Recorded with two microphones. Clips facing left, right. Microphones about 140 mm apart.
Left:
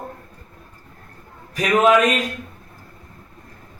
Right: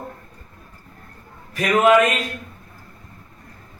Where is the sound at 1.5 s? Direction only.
15° left (ahead or behind).